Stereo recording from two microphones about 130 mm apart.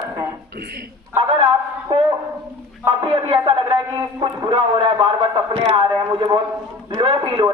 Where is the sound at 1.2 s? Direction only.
45° right (ahead or behind).